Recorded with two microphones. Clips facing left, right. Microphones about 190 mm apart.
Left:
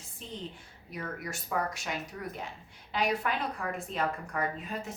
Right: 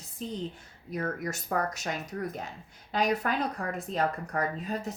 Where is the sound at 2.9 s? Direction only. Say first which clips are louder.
Right 3 dB; 40° right (ahead or behind).